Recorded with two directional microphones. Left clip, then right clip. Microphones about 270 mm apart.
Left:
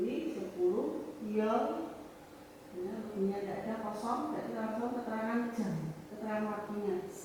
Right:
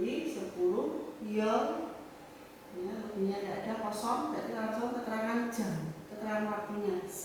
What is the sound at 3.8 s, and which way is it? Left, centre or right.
A woman's voice, centre.